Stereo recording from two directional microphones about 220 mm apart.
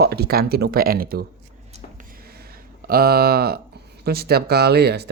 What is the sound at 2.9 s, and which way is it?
Speech, 45° right (ahead or behind).